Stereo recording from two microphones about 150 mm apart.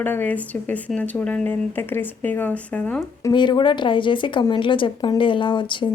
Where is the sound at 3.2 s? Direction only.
30° left (ahead or behind).